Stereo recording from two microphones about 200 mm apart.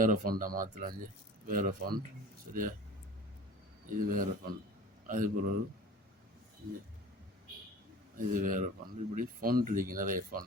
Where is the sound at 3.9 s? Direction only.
45° right (ahead or behind).